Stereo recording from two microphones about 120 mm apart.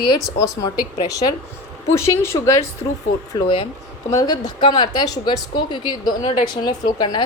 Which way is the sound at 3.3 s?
45° left (ahead or behind).